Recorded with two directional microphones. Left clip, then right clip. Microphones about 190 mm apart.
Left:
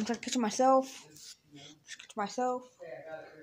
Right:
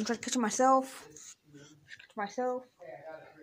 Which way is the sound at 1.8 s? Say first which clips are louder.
Left 1 dB; 15° left (ahead or behind).